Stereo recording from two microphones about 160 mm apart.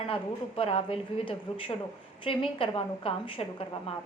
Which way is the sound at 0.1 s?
35° left (ahead or behind).